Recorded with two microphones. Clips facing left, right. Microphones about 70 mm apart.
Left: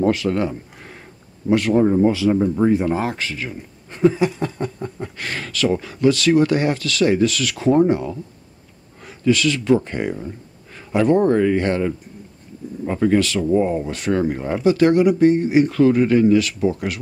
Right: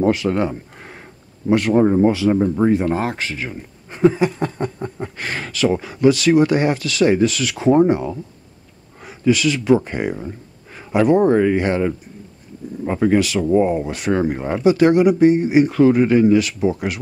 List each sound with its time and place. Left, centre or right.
0.0 s speech: centre
0.4 s a sound: right
1.7 s speech: right
2.1 s speech: centre
2.7 s speech: centre
3.2 s speech: centre